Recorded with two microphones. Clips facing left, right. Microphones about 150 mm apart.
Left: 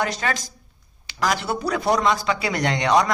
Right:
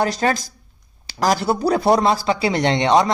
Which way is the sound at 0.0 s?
35° right (ahead or behind).